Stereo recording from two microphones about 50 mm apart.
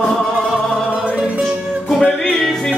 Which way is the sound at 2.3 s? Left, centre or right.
Centre.